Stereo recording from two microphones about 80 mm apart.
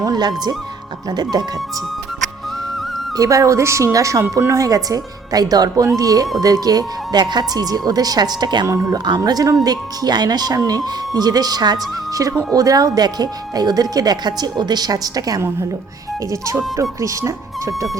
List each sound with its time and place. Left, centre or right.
0.0 s speech: right
3.2 s a woman's voice: right
8.6 s a woman's voice: right
9.0 s speech: right
17.0 s speech: right